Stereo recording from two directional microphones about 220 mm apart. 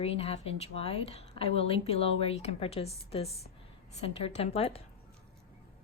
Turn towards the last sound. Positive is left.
turn(degrees=25)  # may be behind; listen again after turning